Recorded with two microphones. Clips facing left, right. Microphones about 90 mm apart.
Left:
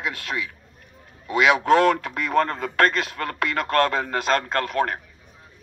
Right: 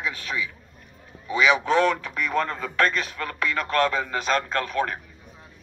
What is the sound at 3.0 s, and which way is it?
A man's voice, 55° left (ahead or behind).